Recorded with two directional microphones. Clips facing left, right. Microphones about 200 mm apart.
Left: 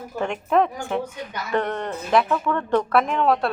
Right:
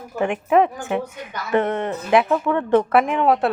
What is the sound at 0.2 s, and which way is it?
Speech, 15° right (ahead or behind).